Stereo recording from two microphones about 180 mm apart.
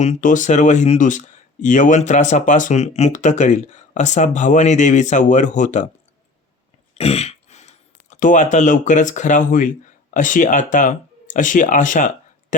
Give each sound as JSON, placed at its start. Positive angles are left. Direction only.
{"t": 0.0, "sound": "speech", "side_deg": 45}
{"t": 6.9, "sound": "throat clearing", "side_deg": 35}
{"t": 8.2, "sound": "speech", "side_deg": 45}